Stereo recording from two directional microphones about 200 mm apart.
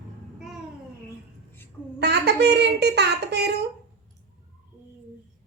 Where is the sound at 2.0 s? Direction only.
55° right (ahead or behind).